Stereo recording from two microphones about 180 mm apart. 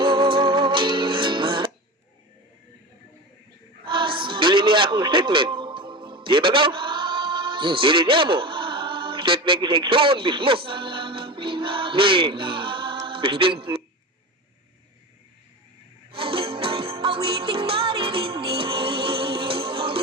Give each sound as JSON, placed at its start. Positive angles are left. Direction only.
{"t": 0.0, "sound": "music", "side_deg": -25}
{"t": 3.8, "sound": "music", "side_deg": -25}
{"t": 16.1, "sound": "music", "side_deg": -30}